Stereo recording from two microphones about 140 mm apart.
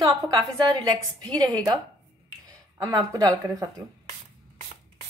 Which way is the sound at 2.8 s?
25° right (ahead or behind).